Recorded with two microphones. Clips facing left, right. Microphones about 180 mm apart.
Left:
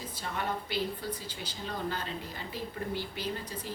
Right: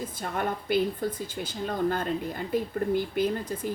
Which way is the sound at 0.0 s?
50° right (ahead or behind).